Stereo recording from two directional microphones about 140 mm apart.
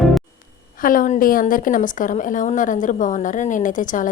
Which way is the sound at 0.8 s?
75° left (ahead or behind).